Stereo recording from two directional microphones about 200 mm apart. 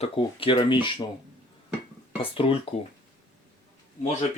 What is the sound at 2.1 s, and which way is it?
Speech, 30° left (ahead or behind).